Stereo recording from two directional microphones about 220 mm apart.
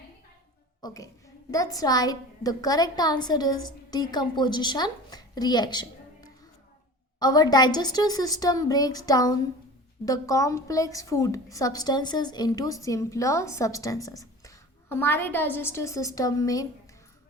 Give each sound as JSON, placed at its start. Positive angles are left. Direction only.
{"t": 0.8, "sound": "a woman's voice", "side_deg": 15}
{"t": 7.2, "sound": "a woman's voice", "side_deg": 20}